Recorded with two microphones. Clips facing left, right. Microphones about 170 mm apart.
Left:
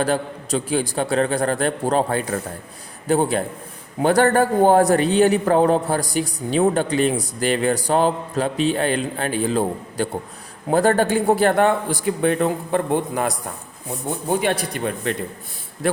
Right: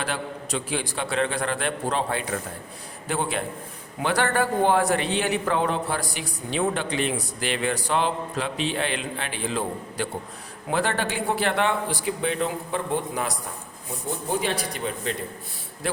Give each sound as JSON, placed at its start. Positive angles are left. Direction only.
{"t": 0.0, "sound": "a man's voice", "side_deg": 40}